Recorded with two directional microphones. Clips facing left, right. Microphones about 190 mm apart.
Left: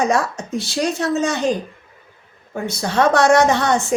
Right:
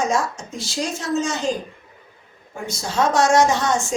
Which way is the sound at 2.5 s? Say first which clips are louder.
Left 5 dB; 60° left (ahead or behind).